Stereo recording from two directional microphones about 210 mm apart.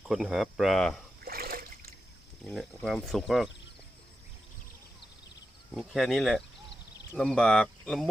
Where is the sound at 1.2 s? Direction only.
45° right (ahead or behind).